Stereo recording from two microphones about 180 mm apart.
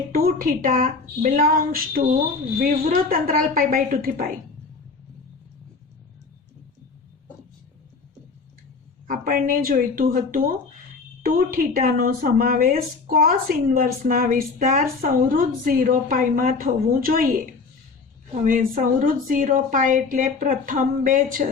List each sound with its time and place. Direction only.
0.1 s speech: 55° right (ahead or behind)
9.0 s speech: 50° right (ahead or behind)